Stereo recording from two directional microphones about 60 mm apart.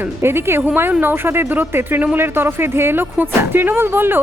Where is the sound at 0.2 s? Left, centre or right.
Right.